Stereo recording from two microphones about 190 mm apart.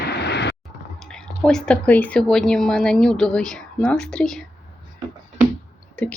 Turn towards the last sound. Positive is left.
turn(degrees=10)  # may be behind; listen again after turning